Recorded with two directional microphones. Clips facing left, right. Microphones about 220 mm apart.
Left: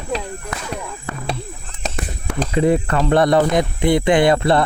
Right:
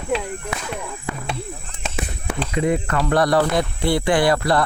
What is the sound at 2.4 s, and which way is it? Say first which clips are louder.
Speech: left 5 dB; 35° left (ahead or behind).